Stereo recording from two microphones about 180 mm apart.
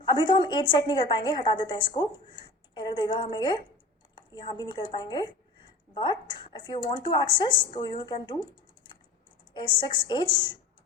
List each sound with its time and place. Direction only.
0.0 s a woman's voice: 25° left (ahead or behind)
9.6 s a woman's voice: 25° left (ahead or behind)